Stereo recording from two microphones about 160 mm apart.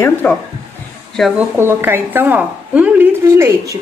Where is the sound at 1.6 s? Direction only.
15° right (ahead or behind).